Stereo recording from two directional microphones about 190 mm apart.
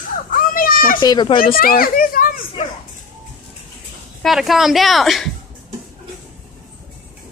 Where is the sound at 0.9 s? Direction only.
25° left (ahead or behind).